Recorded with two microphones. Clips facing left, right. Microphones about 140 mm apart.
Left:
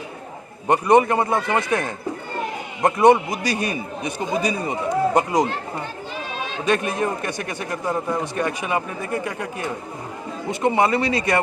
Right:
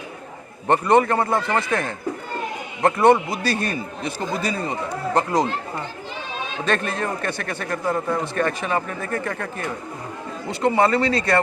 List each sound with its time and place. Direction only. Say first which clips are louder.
0.7 s a man's voice: left 1 dB; 15° left (ahead or behind)
2.8 s a man's voice: left 1 dB; 15° left (ahead or behind)
6.7 s a man's voice: left 3 dB; 15° left (ahead or behind)